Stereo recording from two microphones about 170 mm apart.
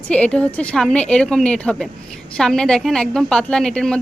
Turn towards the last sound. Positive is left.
turn(degrees=5)  # may be behind; listen again after turning